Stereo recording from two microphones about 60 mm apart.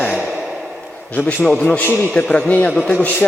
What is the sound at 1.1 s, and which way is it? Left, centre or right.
A man's voice, left.